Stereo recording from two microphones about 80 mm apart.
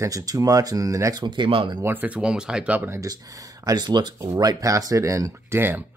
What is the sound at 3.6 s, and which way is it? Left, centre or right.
Speech, right.